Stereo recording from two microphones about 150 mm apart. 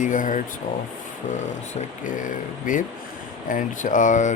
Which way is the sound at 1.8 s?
60° left (ahead or behind).